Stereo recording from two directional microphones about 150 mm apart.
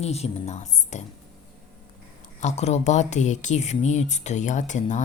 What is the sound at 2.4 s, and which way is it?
Speech, 50° left (ahead or behind).